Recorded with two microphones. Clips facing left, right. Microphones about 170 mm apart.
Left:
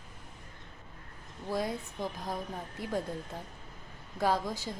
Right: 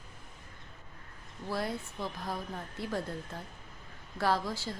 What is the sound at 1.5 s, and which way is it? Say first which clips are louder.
Speech: left 2 dB; 15° left (ahead or behind).